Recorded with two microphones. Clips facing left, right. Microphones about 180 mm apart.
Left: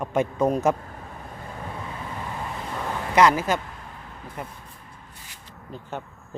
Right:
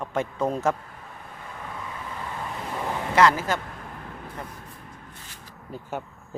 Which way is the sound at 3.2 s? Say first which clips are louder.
Left 2 dB; 20° left (ahead or behind).